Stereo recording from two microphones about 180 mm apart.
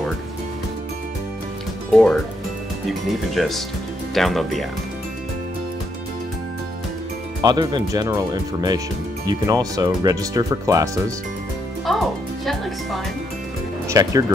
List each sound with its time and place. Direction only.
1.9 s speech: 5° left (ahead or behind)
7.4 s speech: 25° right (ahead or behind)
11.9 s music: centre (ahead or behind)
13.8 s speech: 20° right (ahead or behind)